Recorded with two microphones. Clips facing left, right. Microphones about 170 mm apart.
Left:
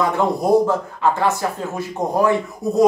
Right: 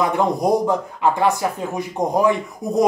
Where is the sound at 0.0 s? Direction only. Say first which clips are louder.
Even; 15° right (ahead or behind).